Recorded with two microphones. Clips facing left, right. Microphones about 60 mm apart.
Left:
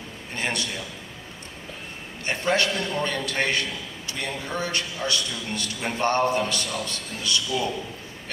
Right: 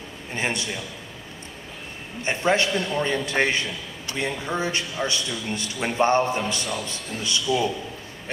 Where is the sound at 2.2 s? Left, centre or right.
Right.